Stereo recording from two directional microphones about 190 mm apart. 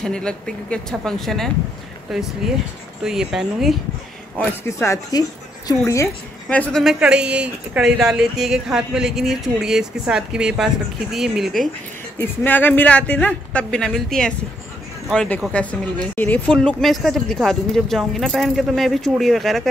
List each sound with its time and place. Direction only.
0.0 s speech: 5° left (ahead or behind)
4.6 s speech: 15° left (ahead or behind)
6.5 s speech: 5° left (ahead or behind)
12.2 s speech: 10° left (ahead or behind)